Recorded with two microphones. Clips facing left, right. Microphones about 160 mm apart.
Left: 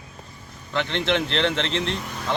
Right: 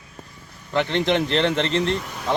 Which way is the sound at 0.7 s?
10° right (ahead or behind).